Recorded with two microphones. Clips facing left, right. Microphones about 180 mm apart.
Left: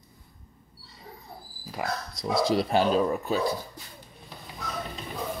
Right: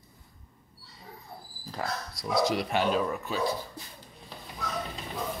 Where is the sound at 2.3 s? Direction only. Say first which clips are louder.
Left 3 dB; 30° left (ahead or behind).